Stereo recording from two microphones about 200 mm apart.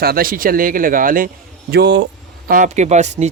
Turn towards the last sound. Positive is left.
turn(degrees=-35)  # may be behind; listen again after turning